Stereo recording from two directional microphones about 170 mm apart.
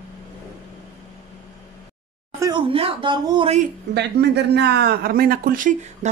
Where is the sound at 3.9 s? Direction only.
80° right.